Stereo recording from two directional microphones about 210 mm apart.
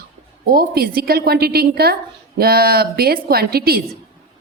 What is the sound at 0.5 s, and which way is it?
Speech, 45° right (ahead or behind).